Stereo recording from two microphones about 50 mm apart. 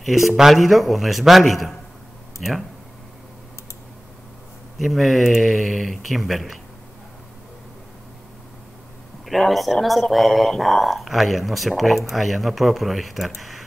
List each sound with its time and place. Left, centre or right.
0.0 s speech: centre
4.7 s speech: centre
9.2 s speech: centre